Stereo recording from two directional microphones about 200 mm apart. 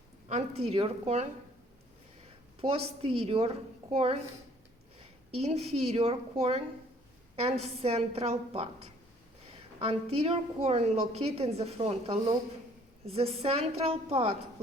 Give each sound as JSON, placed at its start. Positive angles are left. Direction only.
{"t": 0.6, "sound": "a woman's voice", "side_deg": -30}
{"t": 2.6, "sound": "a woman's voice", "side_deg": -30}
{"t": 5.4, "sound": "a woman's voice", "side_deg": -30}
{"t": 7.6, "sound": "a woman's voice", "side_deg": -30}
{"t": 9.7, "sound": "a woman's voice", "side_deg": -30}